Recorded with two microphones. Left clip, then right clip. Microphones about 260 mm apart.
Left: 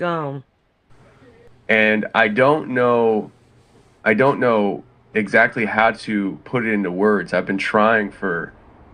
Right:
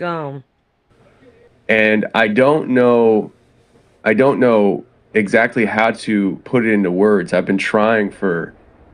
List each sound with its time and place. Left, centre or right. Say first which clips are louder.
0.0 s speech: even; centre
1.9 s speech: right 2 dB; right